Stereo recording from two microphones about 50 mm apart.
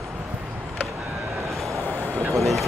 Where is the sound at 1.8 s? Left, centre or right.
Right.